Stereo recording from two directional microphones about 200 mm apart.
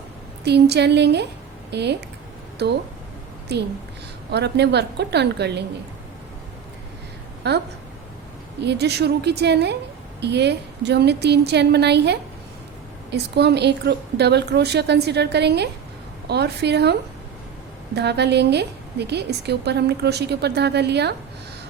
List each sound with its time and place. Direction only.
0.4 s a woman's voice: 55° right (ahead or behind)
7.4 s a woman's voice: 55° right (ahead or behind)
8.6 s a woman's voice: 55° right (ahead or behind)